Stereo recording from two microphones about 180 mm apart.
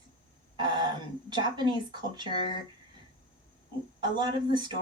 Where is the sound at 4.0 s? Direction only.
25° right (ahead or behind).